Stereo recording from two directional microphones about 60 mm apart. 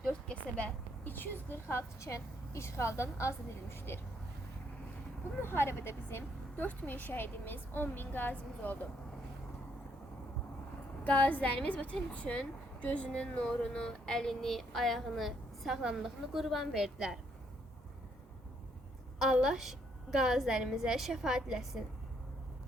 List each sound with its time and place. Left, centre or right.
0.1 s a sound: centre
1.0 s speech: left
1.7 s a woman's voice: left
5.4 s speech: left
11.0 s a woman's voice: left; by 17.2 s centre
19.2 s a woman's voice: centre